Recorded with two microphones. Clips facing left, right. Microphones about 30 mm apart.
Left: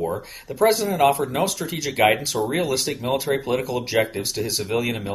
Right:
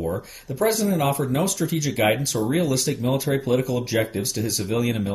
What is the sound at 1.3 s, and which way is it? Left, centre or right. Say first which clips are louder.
Speech: right 1 dB; centre.